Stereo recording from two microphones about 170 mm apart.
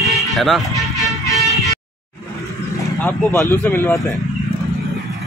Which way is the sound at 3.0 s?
15° left (ahead or behind).